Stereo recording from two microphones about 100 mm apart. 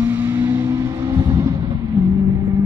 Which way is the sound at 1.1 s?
40° right (ahead or behind).